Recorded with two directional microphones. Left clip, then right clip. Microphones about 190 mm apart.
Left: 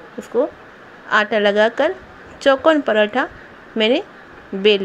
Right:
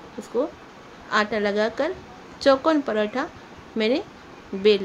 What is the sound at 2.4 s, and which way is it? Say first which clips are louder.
Speech: left 5 dB; 10° left (ahead or behind).